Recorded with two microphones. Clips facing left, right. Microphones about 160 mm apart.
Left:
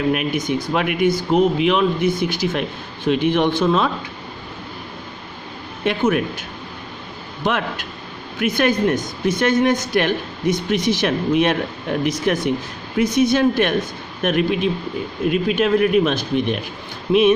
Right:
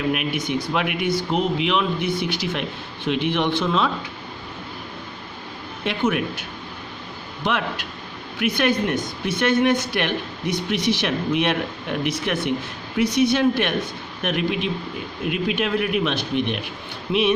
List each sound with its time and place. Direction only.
0.1 s speech: 40° left (ahead or behind)
5.8 s speech: 45° left (ahead or behind)
7.4 s speech: 45° left (ahead or behind)